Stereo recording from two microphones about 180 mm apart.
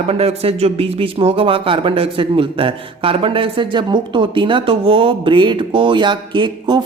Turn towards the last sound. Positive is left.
turn(degrees=-25)  # may be behind; listen again after turning